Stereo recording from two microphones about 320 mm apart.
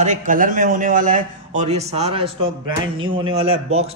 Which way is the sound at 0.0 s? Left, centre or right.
Right.